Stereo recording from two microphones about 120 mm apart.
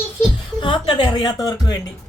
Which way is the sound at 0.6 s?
45° left (ahead or behind).